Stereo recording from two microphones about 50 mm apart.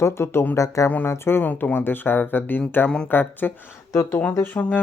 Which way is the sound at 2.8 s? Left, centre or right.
Centre.